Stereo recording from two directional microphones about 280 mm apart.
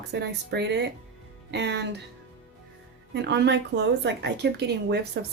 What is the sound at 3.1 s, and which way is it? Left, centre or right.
Speech, right.